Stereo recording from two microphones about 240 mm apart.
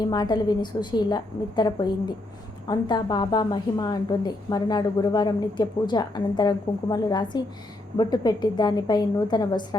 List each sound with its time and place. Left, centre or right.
0.0 s a woman's voice: centre